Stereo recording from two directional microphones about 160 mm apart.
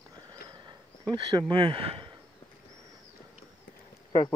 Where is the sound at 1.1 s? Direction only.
30° right (ahead or behind).